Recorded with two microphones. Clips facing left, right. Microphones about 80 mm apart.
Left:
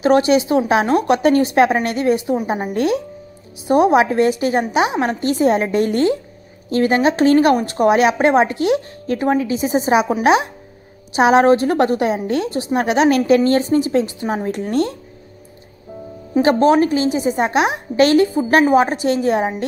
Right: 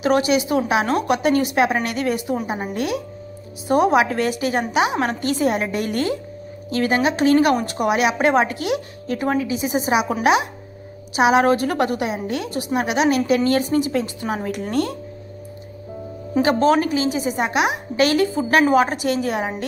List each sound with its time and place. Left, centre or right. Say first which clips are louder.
0.0 s speech: left 4 dB; left
2.7 s a woman's voice: left 7 dB; left
3.6 s a woman's voice: left 3 dB; left
16.5 s speech: left 3 dB; centre
16.8 s speech: left 4 dB; left